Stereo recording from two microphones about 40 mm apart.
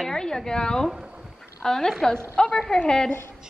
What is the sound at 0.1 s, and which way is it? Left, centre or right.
A woman's voice, centre.